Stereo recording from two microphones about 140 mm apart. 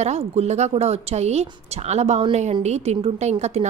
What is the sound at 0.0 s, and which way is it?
A woman's voice, 50° right (ahead or behind).